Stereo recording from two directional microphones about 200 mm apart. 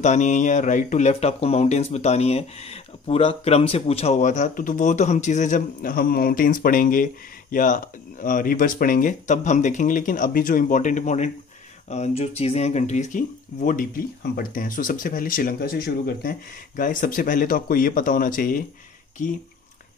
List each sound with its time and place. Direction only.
0.0 s speech: 35° left (ahead or behind)